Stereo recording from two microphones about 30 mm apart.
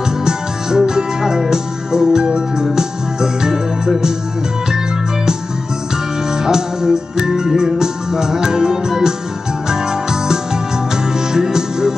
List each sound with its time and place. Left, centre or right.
0.2 s music: right
6.3 s music: right